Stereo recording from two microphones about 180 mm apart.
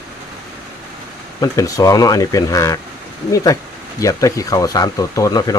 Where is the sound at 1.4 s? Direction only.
20° left (ahead or behind).